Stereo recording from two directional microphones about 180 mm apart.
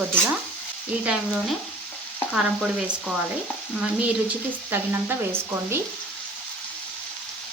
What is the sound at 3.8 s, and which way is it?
Speech, 10° right (ahead or behind).